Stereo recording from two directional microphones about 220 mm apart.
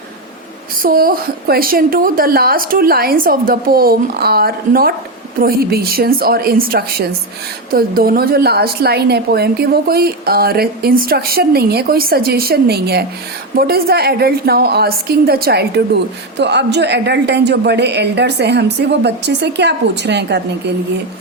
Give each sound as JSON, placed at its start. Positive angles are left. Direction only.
{"t": 0.8, "sound": "a woman's voice", "side_deg": -40}